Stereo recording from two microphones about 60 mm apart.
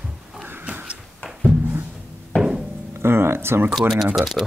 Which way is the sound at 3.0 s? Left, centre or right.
Right.